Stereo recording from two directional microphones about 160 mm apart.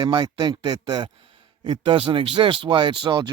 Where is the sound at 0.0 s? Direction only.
30° right (ahead or behind).